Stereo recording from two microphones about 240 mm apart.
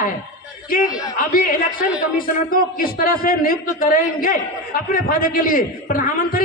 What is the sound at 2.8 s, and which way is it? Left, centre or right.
A man's voice, left.